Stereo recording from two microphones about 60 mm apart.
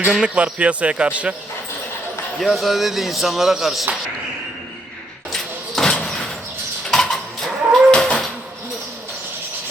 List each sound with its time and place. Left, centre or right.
0.3 s speech: right
2.4 s speech: centre
5.3 s vehicle: centre
7.9 s a sound: centre